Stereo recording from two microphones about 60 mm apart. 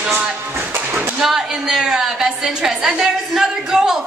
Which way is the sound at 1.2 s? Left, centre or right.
Centre.